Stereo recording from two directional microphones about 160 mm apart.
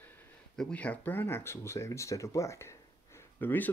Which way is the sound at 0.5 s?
5° left (ahead or behind).